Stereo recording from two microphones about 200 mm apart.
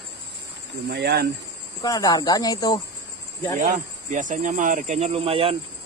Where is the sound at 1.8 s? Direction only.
20° left (ahead or behind).